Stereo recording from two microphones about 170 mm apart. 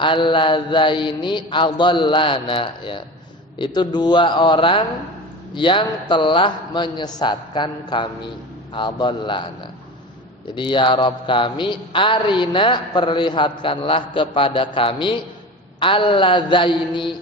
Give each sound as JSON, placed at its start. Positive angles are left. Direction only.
{"t": 0.0, "sound": "a man's voice", "side_deg": 30}
{"t": 10.5, "sound": "a man's voice", "side_deg": 30}